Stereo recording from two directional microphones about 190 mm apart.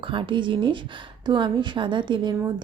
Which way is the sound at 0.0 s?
25° right (ahead or behind).